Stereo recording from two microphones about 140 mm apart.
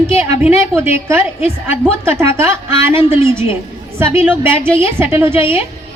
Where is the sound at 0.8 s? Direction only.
20° right (ahead or behind).